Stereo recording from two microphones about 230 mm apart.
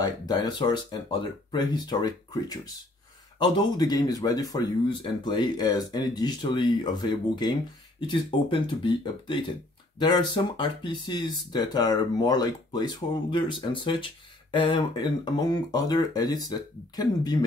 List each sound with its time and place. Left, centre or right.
0.0 s speech: centre